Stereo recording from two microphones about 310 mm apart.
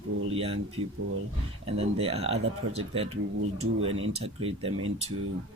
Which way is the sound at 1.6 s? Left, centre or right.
Centre.